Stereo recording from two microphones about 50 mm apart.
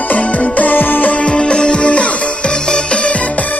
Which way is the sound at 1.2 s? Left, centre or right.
Centre.